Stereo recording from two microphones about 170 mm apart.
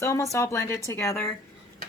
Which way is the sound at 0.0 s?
15° left (ahead or behind).